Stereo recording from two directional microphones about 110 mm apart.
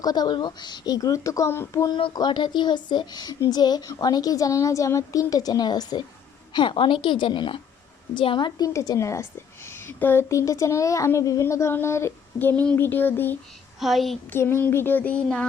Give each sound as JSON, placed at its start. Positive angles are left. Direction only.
{"t": 0.0, "sound": "speech", "side_deg": 40}
{"t": 1.9, "sound": "a woman's voice", "side_deg": 50}
{"t": 13.7, "sound": "speech", "side_deg": 0}
{"t": 14.3, "sound": "child singing", "side_deg": 20}